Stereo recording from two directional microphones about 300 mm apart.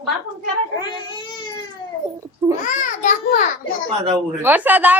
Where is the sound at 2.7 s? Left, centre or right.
Left.